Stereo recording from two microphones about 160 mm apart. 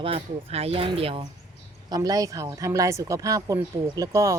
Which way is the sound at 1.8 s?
25° right (ahead or behind).